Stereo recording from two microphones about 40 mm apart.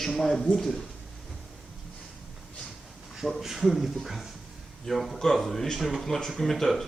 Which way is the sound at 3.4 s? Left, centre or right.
Centre.